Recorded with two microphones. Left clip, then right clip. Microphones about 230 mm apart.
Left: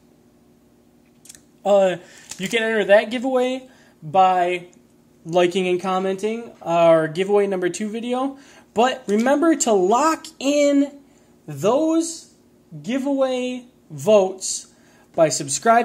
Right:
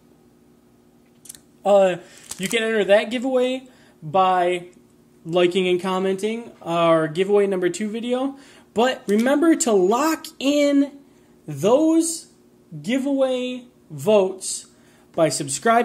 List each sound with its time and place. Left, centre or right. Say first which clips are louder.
1.2 s speech: right 1 dB; centre